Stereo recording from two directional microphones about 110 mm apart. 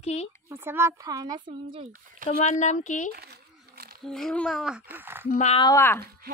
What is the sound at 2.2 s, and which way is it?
Speech, 90° left.